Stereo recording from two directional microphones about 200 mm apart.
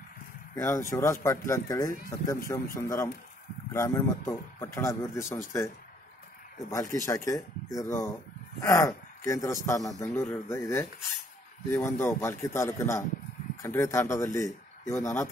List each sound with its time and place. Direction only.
0.6 s speech: 15° left (ahead or behind)
6.7 s speech: 15° left (ahead or behind)